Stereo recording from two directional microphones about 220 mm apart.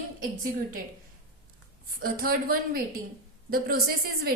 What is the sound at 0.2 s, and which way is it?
Speech, 40° right (ahead or behind).